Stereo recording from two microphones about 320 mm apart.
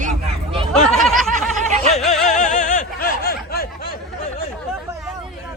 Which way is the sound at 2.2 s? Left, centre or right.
Left.